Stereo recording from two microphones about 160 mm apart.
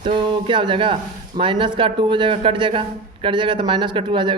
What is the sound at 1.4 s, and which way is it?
Speech, 30° right (ahead or behind).